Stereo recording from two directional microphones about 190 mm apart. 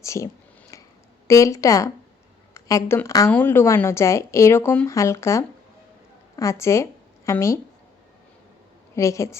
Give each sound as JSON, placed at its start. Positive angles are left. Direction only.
{"t": 0.0, "sound": "speech", "side_deg": 15}
{"t": 0.7, "sound": "a sound", "side_deg": 15}
{"t": 1.3, "sound": "speech", "side_deg": 15}
{"t": 9.0, "sound": "speech", "side_deg": 15}